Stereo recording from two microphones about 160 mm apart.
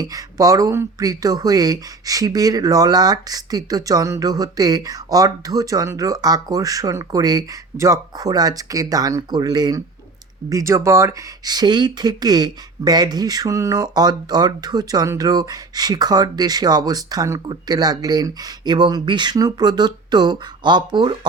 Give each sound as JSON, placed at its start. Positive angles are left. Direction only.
{"t": 0.0, "sound": "speech", "side_deg": -20}